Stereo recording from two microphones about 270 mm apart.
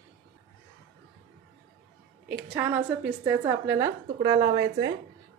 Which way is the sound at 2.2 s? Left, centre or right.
Centre.